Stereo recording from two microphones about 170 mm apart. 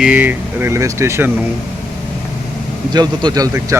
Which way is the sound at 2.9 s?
25° right (ahead or behind).